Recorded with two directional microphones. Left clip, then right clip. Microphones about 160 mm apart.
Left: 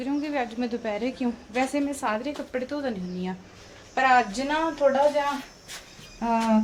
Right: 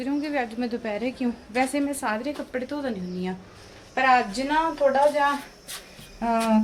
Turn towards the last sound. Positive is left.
turn(degrees=-10)  # may be behind; listen again after turning